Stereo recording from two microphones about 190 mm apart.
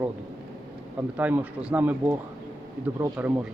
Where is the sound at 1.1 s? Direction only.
10° right (ahead or behind).